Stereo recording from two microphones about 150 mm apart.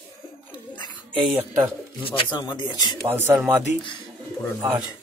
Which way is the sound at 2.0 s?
30° left (ahead or behind).